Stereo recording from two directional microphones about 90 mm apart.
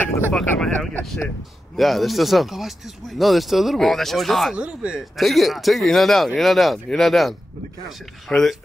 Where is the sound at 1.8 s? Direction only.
Centre (ahead or behind).